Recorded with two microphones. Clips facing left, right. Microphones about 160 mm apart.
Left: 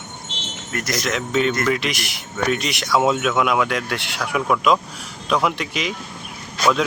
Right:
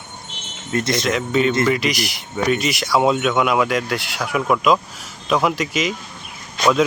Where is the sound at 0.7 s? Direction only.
25° right (ahead or behind).